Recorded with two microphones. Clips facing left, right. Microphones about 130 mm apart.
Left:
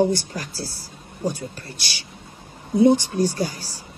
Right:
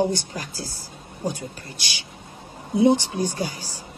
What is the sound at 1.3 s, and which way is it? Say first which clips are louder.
Speech: left 1 dB; 45° left (ahead or behind).